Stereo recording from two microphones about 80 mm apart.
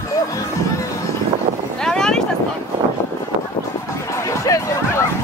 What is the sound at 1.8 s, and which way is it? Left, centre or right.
Boat, centre.